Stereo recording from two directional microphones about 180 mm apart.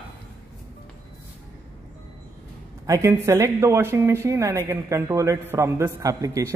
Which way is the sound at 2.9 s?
15° right (ahead or behind).